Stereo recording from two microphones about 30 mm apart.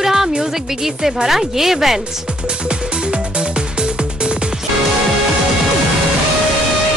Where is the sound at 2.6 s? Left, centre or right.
Right.